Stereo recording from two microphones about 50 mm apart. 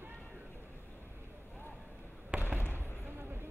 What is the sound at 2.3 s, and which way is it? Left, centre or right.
Basketball bounce, right.